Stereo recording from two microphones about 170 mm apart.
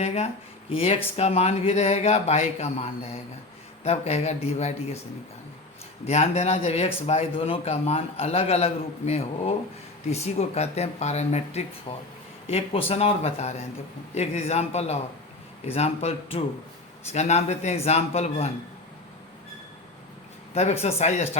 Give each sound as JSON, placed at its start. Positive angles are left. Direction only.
{"t": 0.0, "sound": "speech", "side_deg": 40}
{"t": 6.1, "sound": "speech", "side_deg": 40}
{"t": 20.5, "sound": "speech", "side_deg": 40}